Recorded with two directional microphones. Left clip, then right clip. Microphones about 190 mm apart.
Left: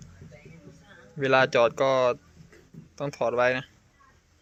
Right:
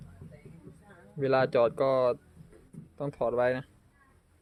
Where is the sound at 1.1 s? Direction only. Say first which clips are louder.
Left 4 dB; 10° right (ahead or behind).